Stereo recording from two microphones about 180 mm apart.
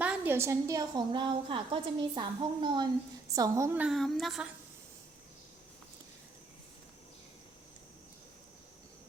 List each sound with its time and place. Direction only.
0.0 s a woman's voice: 10° right (ahead or behind)
3.8 s speech: centre (ahead or behind)